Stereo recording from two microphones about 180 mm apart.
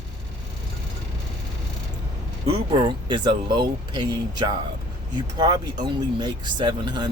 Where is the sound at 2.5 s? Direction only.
25° right (ahead or behind).